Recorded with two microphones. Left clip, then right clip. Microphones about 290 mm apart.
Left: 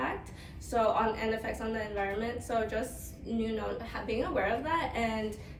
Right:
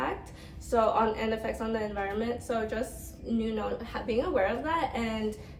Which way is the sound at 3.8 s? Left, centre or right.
Centre.